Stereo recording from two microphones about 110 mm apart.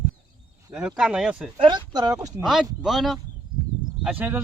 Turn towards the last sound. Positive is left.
turn(degrees=-15)  # may be behind; listen again after turning